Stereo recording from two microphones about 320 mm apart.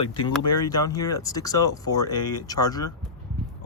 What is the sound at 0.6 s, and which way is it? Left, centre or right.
Speech, centre.